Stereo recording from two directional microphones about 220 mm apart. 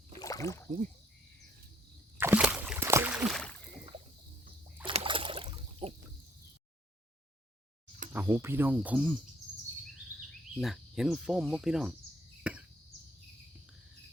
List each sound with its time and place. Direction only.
0.2 s rowboat: 15° left (ahead or behind)
2.1 s a sound: 10° right (ahead or behind)
4.9 s rowboat: 25° right (ahead or behind)
8.1 s speech: 10° right (ahead or behind)
9.9 s cricket: centre (ahead or behind)
12.4 s a sound: 5° right (ahead or behind)